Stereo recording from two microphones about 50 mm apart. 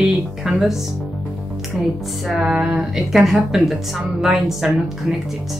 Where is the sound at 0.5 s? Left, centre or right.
Centre.